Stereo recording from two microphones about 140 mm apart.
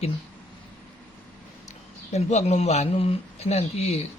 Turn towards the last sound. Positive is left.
turn(degrees=50)  # may be behind; listen again after turning